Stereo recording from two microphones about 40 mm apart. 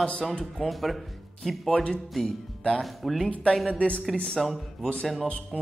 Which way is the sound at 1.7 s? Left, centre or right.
Left.